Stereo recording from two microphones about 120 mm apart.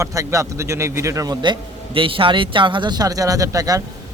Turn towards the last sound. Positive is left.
turn(degrees=-30)  # may be behind; listen again after turning